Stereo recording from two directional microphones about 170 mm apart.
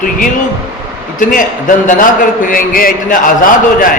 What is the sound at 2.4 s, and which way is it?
A man's voice, 55° left (ahead or behind).